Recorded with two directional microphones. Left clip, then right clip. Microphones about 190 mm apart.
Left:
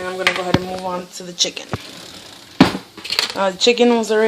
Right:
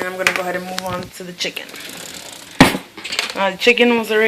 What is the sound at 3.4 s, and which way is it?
Speech, 15° left (ahead or behind).